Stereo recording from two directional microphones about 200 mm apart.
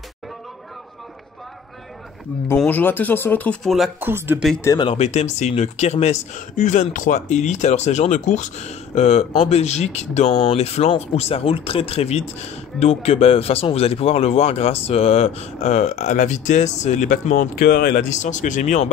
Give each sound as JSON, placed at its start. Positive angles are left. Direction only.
{"t": 2.4, "sound": "speech", "side_deg": 10}
{"t": 4.1, "sound": "speech", "side_deg": -10}
{"t": 4.6, "sound": "speech", "side_deg": 25}